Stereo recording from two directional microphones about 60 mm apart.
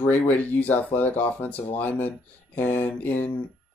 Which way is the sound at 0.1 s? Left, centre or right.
Left.